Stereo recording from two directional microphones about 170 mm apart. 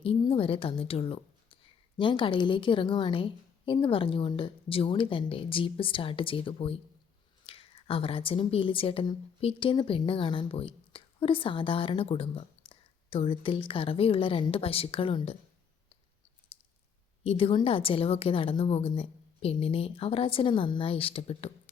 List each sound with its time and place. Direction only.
0.0 s a woman's voice: 30° left (ahead or behind)
17.2 s a woman's voice: 35° left (ahead or behind)